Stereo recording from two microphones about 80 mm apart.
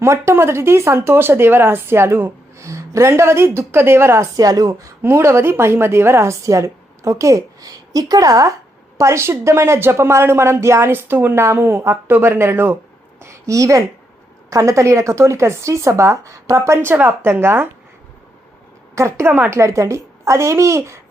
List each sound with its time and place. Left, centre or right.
0.0 s speech: right
4.4 s a woman's voice: right
5.0 s a woman's voice: right
16.7 s a woman's voice: right
18.9 s speech: right